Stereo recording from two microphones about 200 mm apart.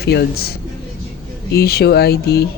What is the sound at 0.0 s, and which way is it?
Speech, 55° left (ahead or behind).